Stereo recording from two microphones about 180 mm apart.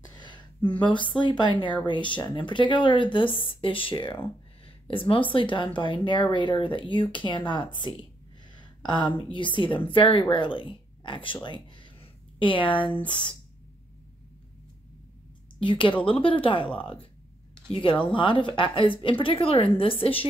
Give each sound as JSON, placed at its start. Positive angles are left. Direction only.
{"t": 0.2, "sound": "a woman's voice", "side_deg": 25}
{"t": 11.4, "sound": "a sound", "side_deg": 25}
{"t": 12.6, "sound": "speech", "side_deg": 25}
{"t": 15.6, "sound": "speech", "side_deg": 30}